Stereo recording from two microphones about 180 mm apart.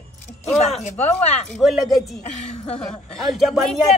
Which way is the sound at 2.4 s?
40° left (ahead or behind).